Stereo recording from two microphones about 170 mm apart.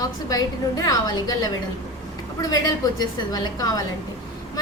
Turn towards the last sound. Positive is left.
turn(degrees=20)  # may be behind; listen again after turning